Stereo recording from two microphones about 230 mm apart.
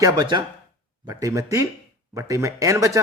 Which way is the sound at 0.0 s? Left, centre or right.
Centre.